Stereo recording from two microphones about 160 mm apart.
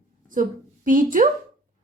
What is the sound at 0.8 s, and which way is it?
Speech, 55° right (ahead or behind).